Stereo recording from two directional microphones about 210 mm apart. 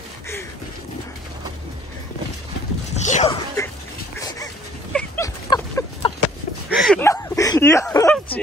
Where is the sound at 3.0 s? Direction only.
35° left (ahead or behind).